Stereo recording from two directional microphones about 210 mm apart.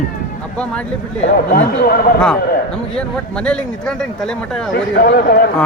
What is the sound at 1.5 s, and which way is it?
Speech, 45° left (ahead or behind).